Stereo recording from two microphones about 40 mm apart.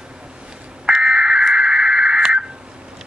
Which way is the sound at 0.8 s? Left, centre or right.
Right.